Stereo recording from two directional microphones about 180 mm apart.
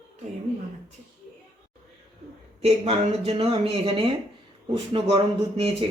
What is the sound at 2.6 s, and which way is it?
Speech, 35° right (ahead or behind).